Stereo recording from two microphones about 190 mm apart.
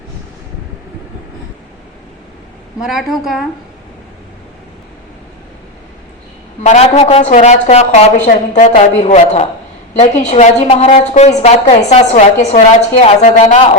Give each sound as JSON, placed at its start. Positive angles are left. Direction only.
{"t": 2.8, "sound": "a woman's voice", "side_deg": 0}
{"t": 6.6, "sound": "a woman's voice", "side_deg": 35}